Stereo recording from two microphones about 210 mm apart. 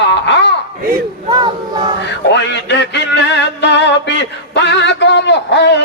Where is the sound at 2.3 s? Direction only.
55° left (ahead or behind).